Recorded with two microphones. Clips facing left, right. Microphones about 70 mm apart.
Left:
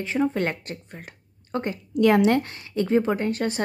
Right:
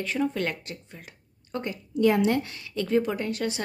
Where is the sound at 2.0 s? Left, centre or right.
Left.